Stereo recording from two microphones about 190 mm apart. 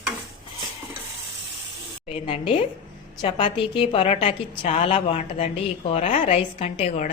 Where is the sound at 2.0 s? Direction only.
30° left (ahead or behind).